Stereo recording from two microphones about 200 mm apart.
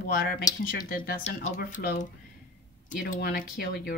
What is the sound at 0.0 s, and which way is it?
A woman's voice, 40° left (ahead or behind).